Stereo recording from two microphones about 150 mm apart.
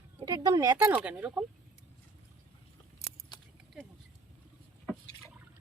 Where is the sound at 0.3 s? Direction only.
25° right (ahead or behind).